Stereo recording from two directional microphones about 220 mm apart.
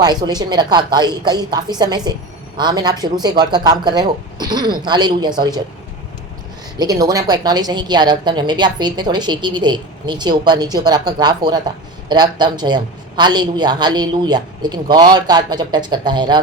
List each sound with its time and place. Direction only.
0.0 s a woman's voice: 20° right (ahead or behind)
6.7 s a woman's voice: 15° right (ahead or behind)